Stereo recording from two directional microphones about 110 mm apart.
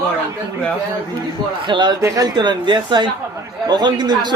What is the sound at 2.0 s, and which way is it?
Speech, 30° right (ahead or behind).